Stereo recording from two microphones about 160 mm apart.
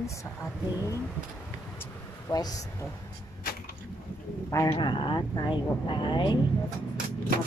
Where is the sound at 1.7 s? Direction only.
20° left (ahead or behind).